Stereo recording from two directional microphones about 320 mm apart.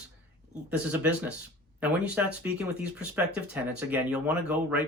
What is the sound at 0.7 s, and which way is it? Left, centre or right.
Speech, centre.